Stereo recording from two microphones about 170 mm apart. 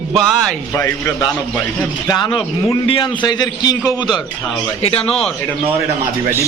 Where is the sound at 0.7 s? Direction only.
15° left (ahead or behind).